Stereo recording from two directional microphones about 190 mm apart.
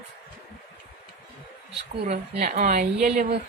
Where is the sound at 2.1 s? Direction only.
40° right (ahead or behind).